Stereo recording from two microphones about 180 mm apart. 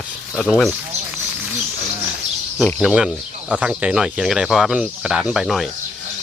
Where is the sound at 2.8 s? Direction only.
5° right (ahead or behind).